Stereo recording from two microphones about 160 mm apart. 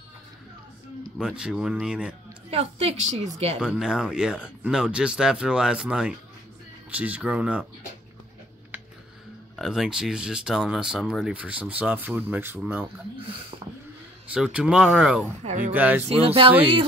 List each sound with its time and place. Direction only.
1.1 s speech: 5° right (ahead or behind)
2.5 s a woman's voice: 40° right (ahead or behind)
3.6 s speech: 5° right (ahead or behind)
9.6 s speech: 5° right (ahead or behind)
14.3 s speech: 5° right (ahead or behind)
15.4 s speech: 50° right (ahead or behind)
15.7 s speech: 10° right (ahead or behind)
16.1 s a woman's voice: 35° right (ahead or behind)